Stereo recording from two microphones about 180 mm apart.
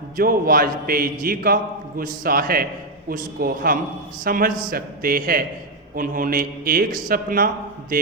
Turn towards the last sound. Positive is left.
turn(degrees=-50)  # may be behind; listen again after turning